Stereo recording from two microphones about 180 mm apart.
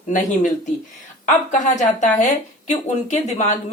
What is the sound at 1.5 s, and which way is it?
A woman's voice, 45° left (ahead or behind).